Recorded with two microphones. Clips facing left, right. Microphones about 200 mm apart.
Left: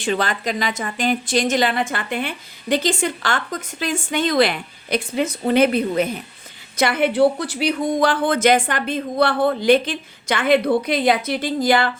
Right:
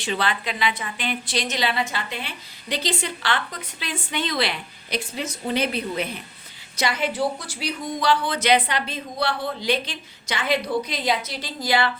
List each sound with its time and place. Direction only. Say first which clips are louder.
0.0 s a woman's voice: left 4 dB; 45° left (ahead or behind)